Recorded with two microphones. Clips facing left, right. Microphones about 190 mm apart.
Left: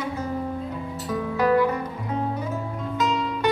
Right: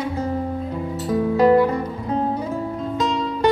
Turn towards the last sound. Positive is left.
turn(degrees=-35)  # may be behind; listen again after turning